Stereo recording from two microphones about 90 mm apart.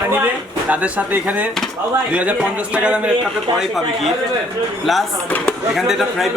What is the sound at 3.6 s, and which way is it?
Speech, centre (ahead or behind).